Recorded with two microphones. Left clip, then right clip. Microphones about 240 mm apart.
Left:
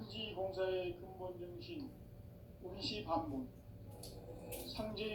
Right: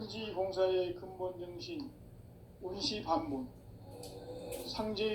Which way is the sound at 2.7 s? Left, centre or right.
Right.